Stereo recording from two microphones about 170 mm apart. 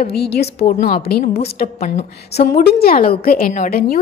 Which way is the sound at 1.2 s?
40° left (ahead or behind).